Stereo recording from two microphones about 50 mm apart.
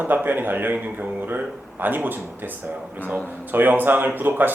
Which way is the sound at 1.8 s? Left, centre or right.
Right.